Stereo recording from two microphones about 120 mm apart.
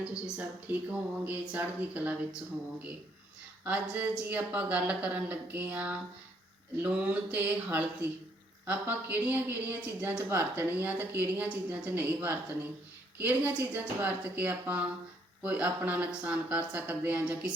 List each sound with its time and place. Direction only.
0.0 s speech: 10° right (ahead or behind)
3.6 s speech: 15° right (ahead or behind)